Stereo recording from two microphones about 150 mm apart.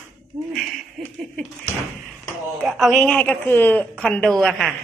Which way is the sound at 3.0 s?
10° left (ahead or behind).